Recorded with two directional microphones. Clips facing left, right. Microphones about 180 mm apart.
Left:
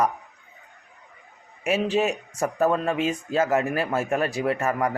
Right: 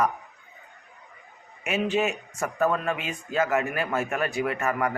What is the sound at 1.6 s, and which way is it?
Speech, 35° left (ahead or behind).